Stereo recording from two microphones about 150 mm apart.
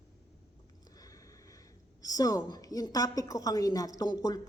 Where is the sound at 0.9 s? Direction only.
25° left (ahead or behind).